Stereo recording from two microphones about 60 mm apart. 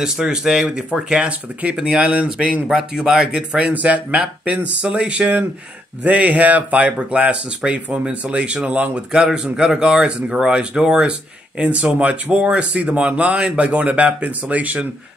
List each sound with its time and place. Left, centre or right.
0.0 s speech: centre
9.1 s speech: centre